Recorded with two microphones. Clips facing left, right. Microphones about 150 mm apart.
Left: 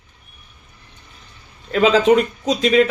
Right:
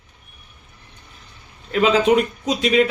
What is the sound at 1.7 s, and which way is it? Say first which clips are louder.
A man's voice: left 2 dB; 35° left (ahead or behind).